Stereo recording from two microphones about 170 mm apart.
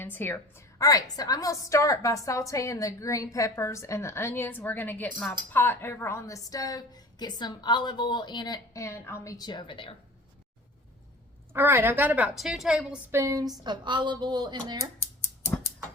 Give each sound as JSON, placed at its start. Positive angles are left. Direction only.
{"t": 0.0, "sound": "a woman's voice", "side_deg": 10}
{"t": 11.5, "sound": "a woman's voice", "side_deg": -15}